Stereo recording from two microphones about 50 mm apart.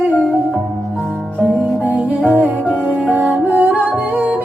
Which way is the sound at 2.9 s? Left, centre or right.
Right.